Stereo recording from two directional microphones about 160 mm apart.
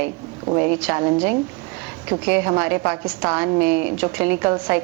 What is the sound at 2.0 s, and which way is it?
A woman's voice, 10° right (ahead or behind).